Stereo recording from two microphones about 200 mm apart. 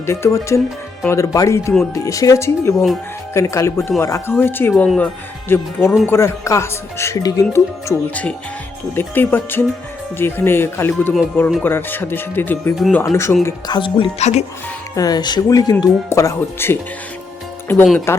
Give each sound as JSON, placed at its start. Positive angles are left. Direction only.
{"t": 0.0, "sound": "speech", "side_deg": 15}
{"t": 6.1, "sound": "speech", "side_deg": 15}
{"t": 14.9, "sound": "speech", "side_deg": 20}
{"t": 17.8, "sound": "speech", "side_deg": 10}